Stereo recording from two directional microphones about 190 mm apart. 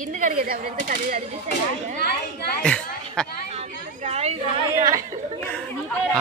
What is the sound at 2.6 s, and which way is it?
Speech, 5° left (ahead or behind).